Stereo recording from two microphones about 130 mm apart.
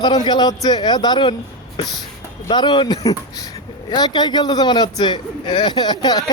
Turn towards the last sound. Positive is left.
turn(degrees=30)  # may be behind; listen again after turning